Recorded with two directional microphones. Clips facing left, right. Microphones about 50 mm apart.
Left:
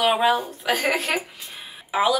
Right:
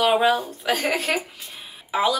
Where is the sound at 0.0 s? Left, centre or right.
Centre.